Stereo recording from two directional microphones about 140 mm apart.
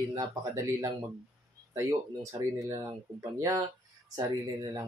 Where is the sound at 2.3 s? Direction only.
20° right (ahead or behind).